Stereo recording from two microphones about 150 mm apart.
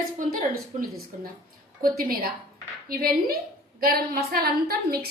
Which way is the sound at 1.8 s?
80° right.